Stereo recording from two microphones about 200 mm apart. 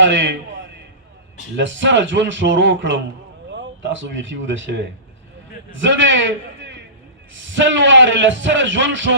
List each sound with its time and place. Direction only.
0.0 s a man's voice: 70° right (ahead or behind)